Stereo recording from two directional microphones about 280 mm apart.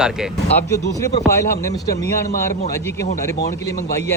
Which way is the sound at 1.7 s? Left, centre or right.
Centre.